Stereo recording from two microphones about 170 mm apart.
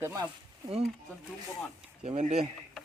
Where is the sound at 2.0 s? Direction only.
40° right (ahead or behind).